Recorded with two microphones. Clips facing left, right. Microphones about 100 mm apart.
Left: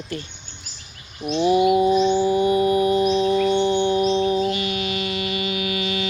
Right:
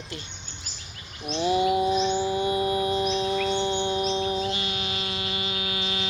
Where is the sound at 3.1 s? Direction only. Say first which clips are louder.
Left 7 dB; 30° left (ahead or behind).